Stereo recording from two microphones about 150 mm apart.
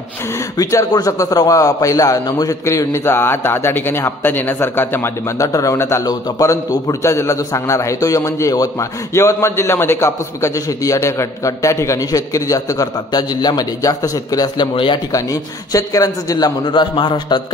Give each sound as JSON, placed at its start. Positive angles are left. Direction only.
{"t": 0.6, "sound": "a man's voice", "side_deg": 20}